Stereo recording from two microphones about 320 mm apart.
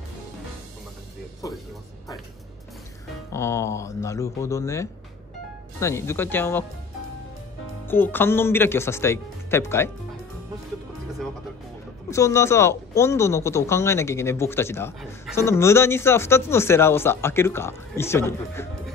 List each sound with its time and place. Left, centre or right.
3.3 s speech: centre
7.8 s speech: centre
12.1 s speech: centre